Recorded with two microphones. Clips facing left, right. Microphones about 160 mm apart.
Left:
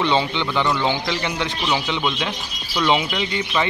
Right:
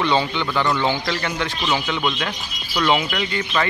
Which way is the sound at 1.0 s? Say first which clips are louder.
Even; 15° left (ahead or behind).